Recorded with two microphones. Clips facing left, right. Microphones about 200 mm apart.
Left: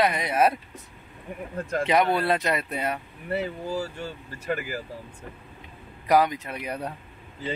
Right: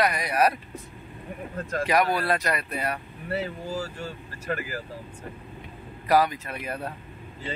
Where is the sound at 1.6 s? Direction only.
20° left (ahead or behind).